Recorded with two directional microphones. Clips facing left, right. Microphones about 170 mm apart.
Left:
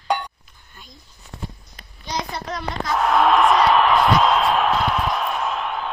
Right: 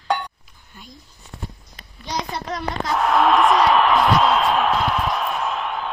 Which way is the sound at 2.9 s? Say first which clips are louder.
Even; centre (ahead or behind).